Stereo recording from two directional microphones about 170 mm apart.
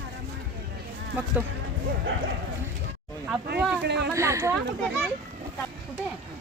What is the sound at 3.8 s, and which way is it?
Speech, 90° right.